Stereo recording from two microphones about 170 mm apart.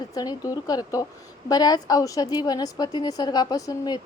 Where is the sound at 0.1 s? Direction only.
20° left (ahead or behind).